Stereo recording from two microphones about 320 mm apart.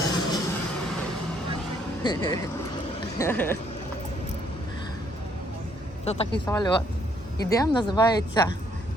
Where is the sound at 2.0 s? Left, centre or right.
Centre.